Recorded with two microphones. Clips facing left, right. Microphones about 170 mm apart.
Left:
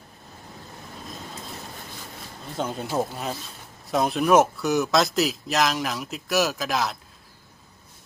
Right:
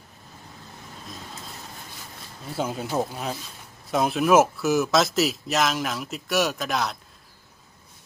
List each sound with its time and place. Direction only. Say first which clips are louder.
2.6 s speech: even; 5° right (ahead or behind)